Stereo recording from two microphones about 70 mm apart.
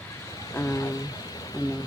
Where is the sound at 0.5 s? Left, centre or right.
Left.